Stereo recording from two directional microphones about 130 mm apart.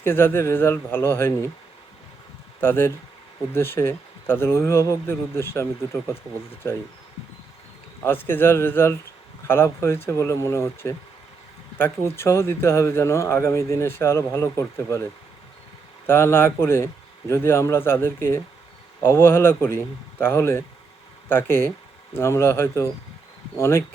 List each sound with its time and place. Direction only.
0.0 s speech: 20° left (ahead or behind)
2.6 s speech: 20° left (ahead or behind)
8.3 s a man's voice: 20° left (ahead or behind)
16.0 s speech: 20° left (ahead or behind)